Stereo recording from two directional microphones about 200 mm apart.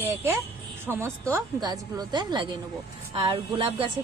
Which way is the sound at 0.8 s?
15° right (ahead or behind).